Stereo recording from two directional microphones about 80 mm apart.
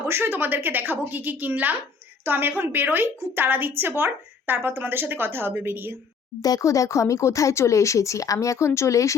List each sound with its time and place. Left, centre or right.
0.1 s a woman's voice: right
6.4 s speech: left